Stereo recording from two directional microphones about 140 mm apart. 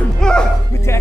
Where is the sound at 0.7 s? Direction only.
20° left (ahead or behind).